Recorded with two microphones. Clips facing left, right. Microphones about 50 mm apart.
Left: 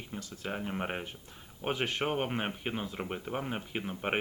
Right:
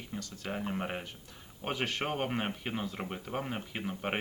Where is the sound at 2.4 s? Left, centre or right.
Centre.